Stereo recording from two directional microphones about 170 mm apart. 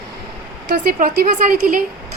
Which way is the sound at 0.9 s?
55° right (ahead or behind).